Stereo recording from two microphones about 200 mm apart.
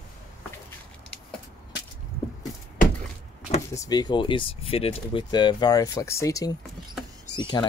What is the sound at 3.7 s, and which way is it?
Speech, 20° left (ahead or behind).